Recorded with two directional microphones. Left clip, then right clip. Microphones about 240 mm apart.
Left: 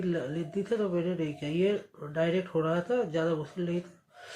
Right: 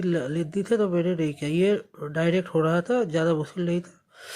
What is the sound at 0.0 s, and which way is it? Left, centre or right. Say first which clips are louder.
Speech: right 6 dB; right.